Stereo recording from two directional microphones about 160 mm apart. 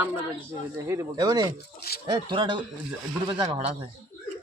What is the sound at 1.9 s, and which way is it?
Speech, 75° left (ahead or behind).